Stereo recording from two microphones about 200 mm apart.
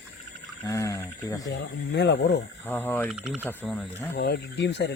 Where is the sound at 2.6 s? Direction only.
10° left (ahead or behind).